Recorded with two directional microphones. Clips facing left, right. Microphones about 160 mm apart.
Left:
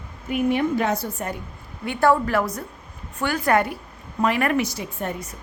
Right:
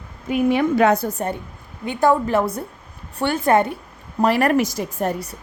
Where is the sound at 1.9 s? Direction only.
15° right (ahead or behind).